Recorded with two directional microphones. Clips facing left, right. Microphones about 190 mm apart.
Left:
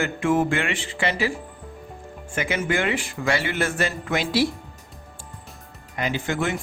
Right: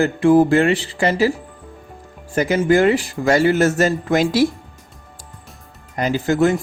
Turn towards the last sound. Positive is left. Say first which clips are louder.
# right 9 dB
turn(degrees=-40)  # may be behind; listen again after turning